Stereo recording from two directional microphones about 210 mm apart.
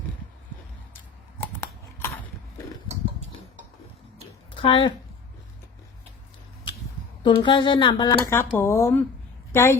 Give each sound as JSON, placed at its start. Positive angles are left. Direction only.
{"t": 0.9, "sound": "a sound", "side_deg": 10}
{"t": 4.5, "sound": "speech", "side_deg": 25}
{"t": 7.3, "sound": "a woman's voice", "side_deg": 20}